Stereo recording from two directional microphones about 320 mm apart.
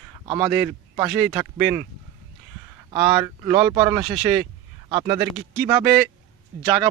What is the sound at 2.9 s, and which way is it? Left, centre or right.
Speech, centre.